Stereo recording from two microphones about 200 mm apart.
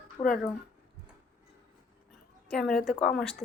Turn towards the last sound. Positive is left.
turn(degrees=0)  # may be behind; listen again after turning